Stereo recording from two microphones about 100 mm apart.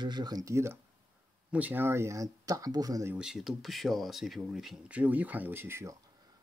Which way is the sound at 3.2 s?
5° right (ahead or behind).